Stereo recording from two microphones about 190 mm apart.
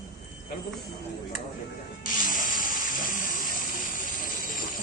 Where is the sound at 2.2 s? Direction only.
45° left (ahead or behind).